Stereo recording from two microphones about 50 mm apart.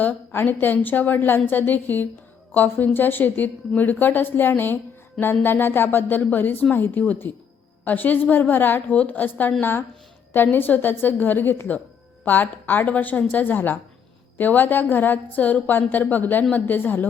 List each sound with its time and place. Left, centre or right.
0.0 s a woman's voice: left